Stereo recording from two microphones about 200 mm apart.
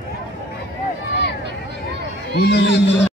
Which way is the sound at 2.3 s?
55° left (ahead or behind).